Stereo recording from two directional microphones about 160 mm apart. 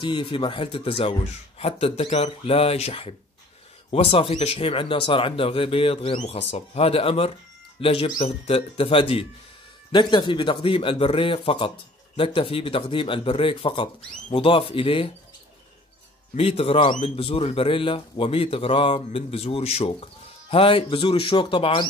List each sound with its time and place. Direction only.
0.0 s speech: 30° left (ahead or behind)
16.3 s speech: 35° left (ahead or behind)